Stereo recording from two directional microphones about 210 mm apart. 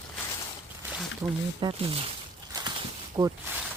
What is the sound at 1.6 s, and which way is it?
Speech, 25° right (ahead or behind).